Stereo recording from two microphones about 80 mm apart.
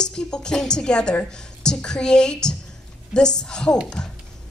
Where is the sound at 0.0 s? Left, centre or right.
Centre.